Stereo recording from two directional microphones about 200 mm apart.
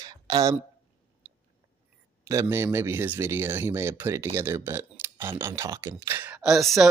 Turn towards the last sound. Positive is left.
turn(degrees=0)  # may be behind; listen again after turning